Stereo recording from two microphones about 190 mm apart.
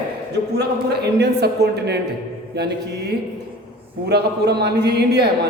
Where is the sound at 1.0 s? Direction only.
60° right (ahead or behind).